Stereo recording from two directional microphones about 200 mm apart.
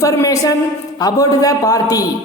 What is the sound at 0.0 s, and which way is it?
A woman's voice, 15° left (ahead or behind).